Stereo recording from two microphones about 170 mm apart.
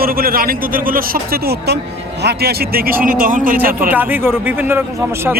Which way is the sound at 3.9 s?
10° right (ahead or behind).